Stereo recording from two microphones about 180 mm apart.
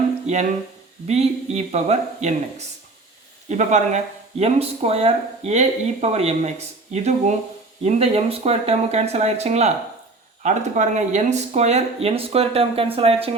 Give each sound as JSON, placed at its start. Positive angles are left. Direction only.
{"t": 1.0, "sound": "speech", "side_deg": -35}